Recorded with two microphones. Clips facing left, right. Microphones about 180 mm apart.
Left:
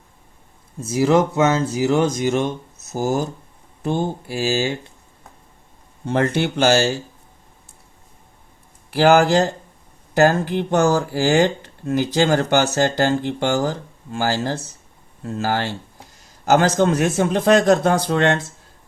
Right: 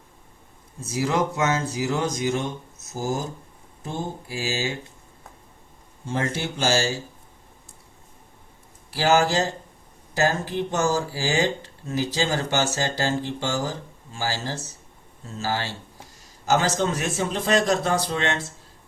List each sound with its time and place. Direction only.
0.9 s speech: 65° left (ahead or behind)
6.1 s speech: 65° left (ahead or behind)
8.9 s a man's voice: 60° left (ahead or behind)